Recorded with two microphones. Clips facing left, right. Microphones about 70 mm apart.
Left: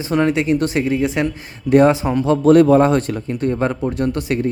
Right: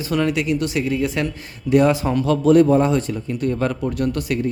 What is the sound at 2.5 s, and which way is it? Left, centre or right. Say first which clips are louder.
Speech: left 3 dB; left.